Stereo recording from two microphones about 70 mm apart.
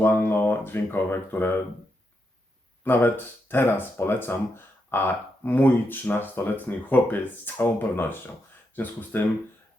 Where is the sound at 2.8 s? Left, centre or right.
Left.